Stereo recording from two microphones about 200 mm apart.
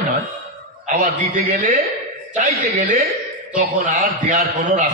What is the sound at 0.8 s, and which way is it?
A man's voice, 35° right (ahead or behind).